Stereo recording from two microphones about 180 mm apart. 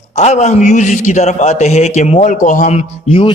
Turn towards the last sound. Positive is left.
turn(degrees=30)  # may be behind; listen again after turning